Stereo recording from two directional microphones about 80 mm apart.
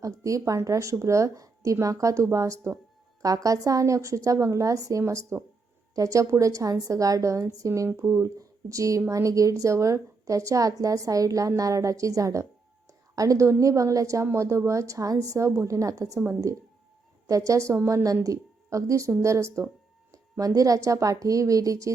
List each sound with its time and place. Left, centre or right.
0.0 s a woman's voice: right
17.2 s speech: right
19.2 s a sound: right
20.4 s speech: right